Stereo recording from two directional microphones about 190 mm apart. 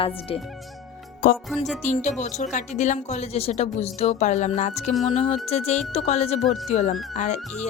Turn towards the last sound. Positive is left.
turn(degrees=40)  # may be behind; listen again after turning